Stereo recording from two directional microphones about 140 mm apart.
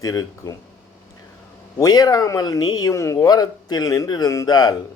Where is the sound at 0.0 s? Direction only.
25° left (ahead or behind).